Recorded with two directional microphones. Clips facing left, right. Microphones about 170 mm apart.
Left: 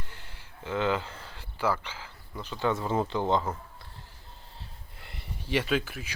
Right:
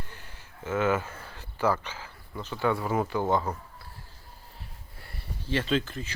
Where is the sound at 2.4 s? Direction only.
15° left (ahead or behind).